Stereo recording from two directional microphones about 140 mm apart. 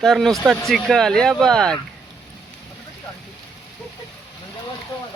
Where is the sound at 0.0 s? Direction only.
Centre (ahead or behind).